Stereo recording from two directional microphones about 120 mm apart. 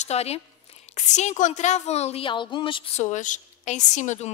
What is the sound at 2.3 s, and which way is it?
Speech, 40° left (ahead or behind).